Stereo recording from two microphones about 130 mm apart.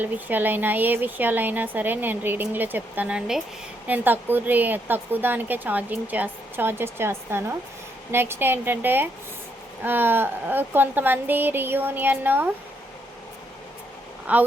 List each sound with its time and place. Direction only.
0.0 s speech: 15° right (ahead or behind)
14.3 s speech: 10° right (ahead or behind)